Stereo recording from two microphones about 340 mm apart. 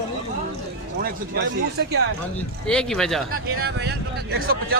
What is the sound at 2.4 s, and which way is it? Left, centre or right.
Speech, centre.